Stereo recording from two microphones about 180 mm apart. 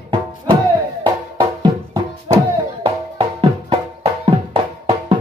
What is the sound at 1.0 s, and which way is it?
Music, 25° right (ahead or behind).